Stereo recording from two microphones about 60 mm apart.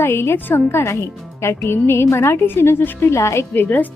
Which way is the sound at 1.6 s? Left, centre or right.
Left.